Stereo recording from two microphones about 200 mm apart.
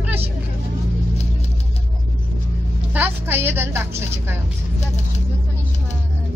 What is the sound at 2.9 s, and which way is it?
A woman's voice, 10° right (ahead or behind).